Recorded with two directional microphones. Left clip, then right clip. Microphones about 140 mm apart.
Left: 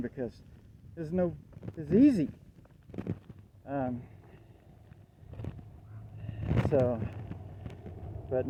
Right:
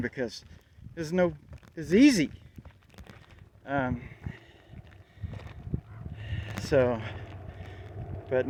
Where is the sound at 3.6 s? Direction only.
55° right (ahead or behind).